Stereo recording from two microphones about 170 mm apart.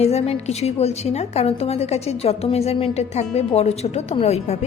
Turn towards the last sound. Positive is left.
turn(degrees=40)  # may be behind; listen again after turning